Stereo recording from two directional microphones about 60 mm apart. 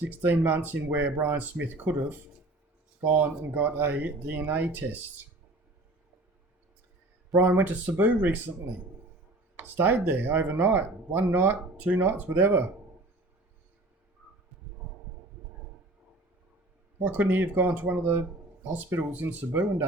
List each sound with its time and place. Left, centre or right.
0.0 s speech: right
7.4 s speech: right
9.6 s speech: right
17.0 s speech: right